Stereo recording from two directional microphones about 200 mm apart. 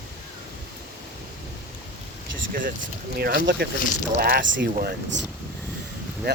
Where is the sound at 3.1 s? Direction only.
50° right (ahead or behind).